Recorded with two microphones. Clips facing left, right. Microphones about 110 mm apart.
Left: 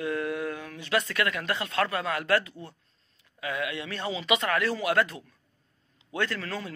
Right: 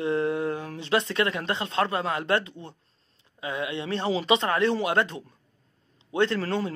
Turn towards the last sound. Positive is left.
turn(degrees=-30)  # may be behind; listen again after turning